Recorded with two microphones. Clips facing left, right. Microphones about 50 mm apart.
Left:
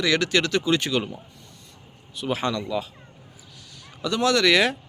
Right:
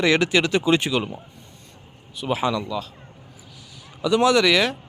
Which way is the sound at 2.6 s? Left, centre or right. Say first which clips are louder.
Left 1 dB; centre.